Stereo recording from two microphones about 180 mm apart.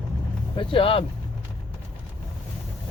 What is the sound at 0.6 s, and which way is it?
Speech, 30° left (ahead or behind).